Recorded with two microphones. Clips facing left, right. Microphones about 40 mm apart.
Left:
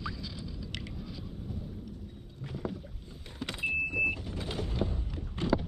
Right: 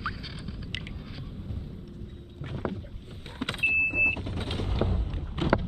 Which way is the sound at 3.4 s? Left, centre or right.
Right.